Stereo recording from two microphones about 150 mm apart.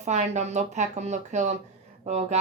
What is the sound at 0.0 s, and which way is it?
A woman's voice, 50° right (ahead or behind).